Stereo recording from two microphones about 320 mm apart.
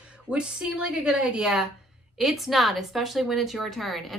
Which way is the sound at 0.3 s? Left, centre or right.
Centre.